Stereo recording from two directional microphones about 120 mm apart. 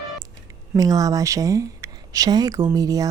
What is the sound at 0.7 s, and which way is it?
Speech, 30° right (ahead or behind).